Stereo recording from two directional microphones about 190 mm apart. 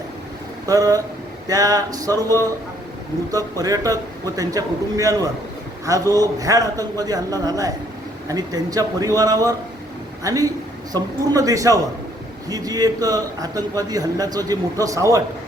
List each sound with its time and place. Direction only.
0.7 s a man's voice: 20° right (ahead or behind)
3.3 s a man's voice: 20° right (ahead or behind)